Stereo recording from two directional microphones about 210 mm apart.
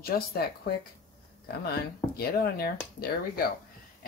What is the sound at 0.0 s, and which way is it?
Speech, 45° left (ahead or behind).